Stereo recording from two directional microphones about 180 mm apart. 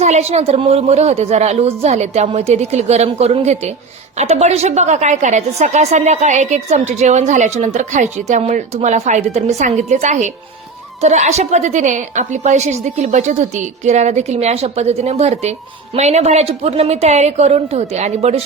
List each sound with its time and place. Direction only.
0.0 s a woman's voice: 35° right (ahead or behind)